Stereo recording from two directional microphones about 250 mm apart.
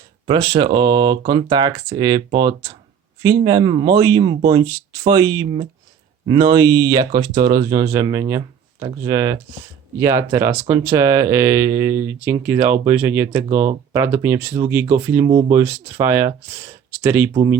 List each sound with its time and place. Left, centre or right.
0.3 s speech: centre